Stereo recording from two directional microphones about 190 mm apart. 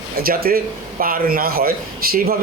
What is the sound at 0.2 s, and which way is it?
Speech, 50° right (ahead or behind).